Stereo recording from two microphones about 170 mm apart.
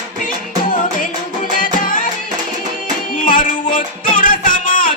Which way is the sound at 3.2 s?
50° left (ahead or behind).